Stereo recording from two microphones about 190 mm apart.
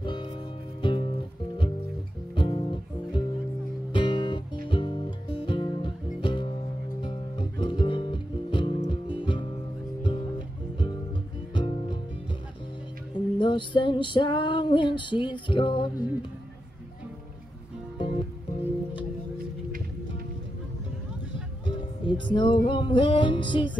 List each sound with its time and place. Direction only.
0.0 s music: 25° left (ahead or behind)
11.5 s music: 25° left (ahead or behind)
13.4 s female singing: 25° left (ahead or behind)
17.9 s music: 30° left (ahead or behind)
21.6 s music: 25° left (ahead or behind)
22.7 s female singing: 25° left (ahead or behind)